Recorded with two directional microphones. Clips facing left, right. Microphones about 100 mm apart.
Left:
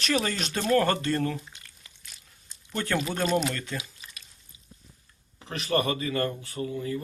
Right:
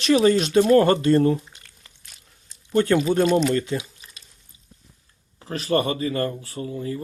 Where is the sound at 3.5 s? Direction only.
20° right (ahead or behind).